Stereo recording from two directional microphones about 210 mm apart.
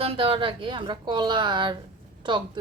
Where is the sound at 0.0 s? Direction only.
25° right (ahead or behind).